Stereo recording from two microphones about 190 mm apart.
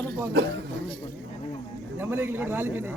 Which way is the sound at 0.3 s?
60° right (ahead or behind).